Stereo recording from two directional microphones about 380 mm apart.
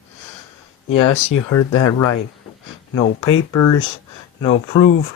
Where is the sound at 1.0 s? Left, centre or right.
Left.